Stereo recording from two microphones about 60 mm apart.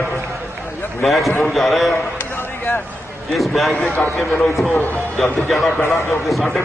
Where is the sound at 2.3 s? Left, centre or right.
Left.